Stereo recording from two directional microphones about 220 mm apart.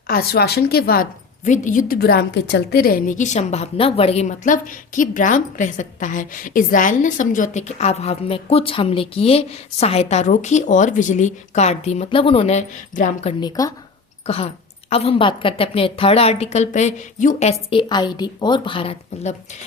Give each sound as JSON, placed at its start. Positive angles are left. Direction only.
{"t": 0.1, "sound": "a woman's voice", "side_deg": 45}
{"t": 13.4, "sound": "speech", "side_deg": 15}
{"t": 14.3, "sound": "a woman's voice", "side_deg": 25}